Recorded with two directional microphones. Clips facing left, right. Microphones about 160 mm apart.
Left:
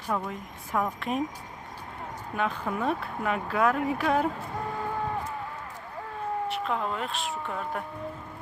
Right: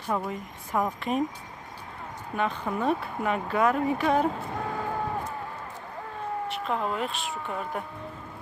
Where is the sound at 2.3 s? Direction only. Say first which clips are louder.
Right 1 dB; centre (ahead or behind).